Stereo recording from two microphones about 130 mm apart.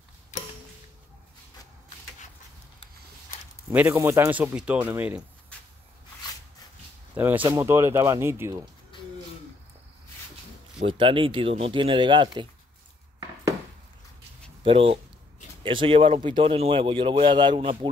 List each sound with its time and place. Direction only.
3.7 s speech: 15° right (ahead or behind)
7.4 s speech: 20° right (ahead or behind)
10.9 s speech: 40° right (ahead or behind)
14.6 s speech: 45° right (ahead or behind)